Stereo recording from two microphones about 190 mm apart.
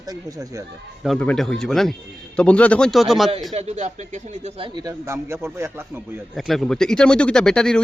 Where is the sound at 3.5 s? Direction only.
35° right (ahead or behind); by 6.0 s 15° right (ahead or behind).